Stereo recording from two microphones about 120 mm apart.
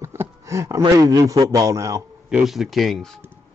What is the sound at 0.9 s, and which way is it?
A man's voice, 30° right (ahead or behind).